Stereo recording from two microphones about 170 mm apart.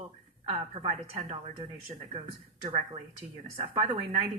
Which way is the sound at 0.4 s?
35° right (ahead or behind).